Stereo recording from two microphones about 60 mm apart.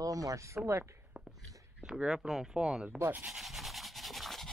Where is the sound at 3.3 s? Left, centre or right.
Centre.